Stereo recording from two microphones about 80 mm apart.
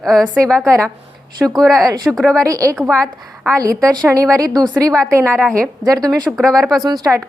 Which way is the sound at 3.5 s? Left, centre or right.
Right.